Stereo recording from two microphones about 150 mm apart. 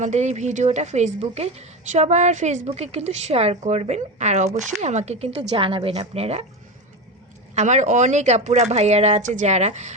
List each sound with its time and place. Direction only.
0.0 s a woman's voice: 50° right (ahead or behind)
7.5 s a woman's voice: 50° right (ahead or behind)